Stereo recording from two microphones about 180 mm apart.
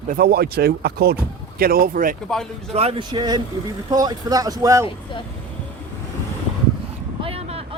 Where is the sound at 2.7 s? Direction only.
30° right (ahead or behind).